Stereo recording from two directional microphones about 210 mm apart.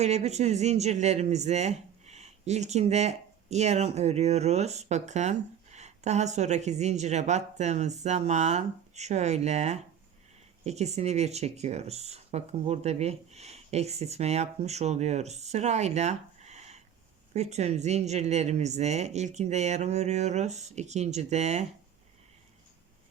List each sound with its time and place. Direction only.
0.0 s speech: 30° right (ahead or behind)